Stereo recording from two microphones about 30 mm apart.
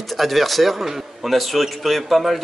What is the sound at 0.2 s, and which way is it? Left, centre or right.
A man's voice, centre.